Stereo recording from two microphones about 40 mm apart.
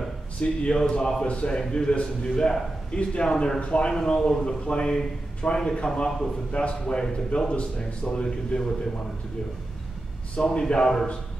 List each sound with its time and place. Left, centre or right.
0.4 s speech: centre
1.2 s speech: left
1.6 s speech: centre
3.9 s speech: centre
10.3 s speech: left